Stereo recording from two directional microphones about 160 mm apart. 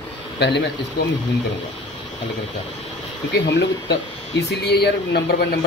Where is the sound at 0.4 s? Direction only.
90° left.